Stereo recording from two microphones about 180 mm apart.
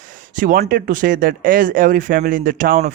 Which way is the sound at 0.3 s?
50° right (ahead or behind).